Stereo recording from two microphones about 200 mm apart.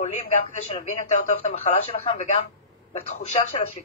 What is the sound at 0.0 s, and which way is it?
Speech, 35° left (ahead or behind).